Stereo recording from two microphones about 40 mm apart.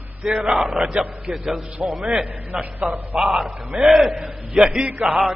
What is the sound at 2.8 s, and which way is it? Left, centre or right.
A man's voice, centre.